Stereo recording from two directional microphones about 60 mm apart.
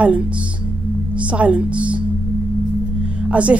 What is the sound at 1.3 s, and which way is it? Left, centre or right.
Speech, right.